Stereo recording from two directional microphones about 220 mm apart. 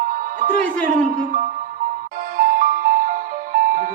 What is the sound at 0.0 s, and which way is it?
Music, 40° right (ahead or behind).